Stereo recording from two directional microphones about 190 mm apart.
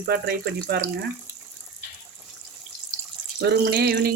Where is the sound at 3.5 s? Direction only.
60° right (ahead or behind).